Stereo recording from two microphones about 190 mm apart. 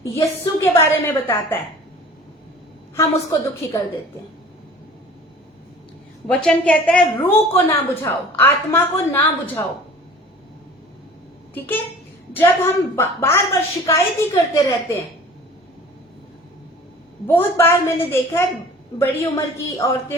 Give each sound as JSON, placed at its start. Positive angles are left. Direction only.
{"t": 0.2, "sound": "a woman's voice", "side_deg": 15}
{"t": 2.9, "sound": "a woman's voice", "side_deg": 15}
{"t": 6.2, "sound": "a woman's voice", "side_deg": 5}
{"t": 7.2, "sound": "a woman's voice", "side_deg": 30}
{"t": 7.5, "sound": "a woman's voice", "side_deg": 15}
{"t": 11.5, "sound": "a woman's voice", "side_deg": 10}
{"t": 17.2, "sound": "a woman's voice", "side_deg": 10}